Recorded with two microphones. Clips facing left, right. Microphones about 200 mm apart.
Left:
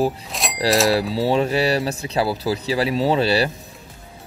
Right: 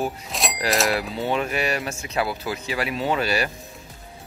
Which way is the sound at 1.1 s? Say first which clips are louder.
Left 6 dB; 35° left (ahead or behind).